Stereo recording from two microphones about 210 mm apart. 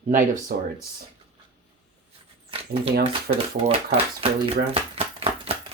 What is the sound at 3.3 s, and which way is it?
Speech, 45° right (ahead or behind).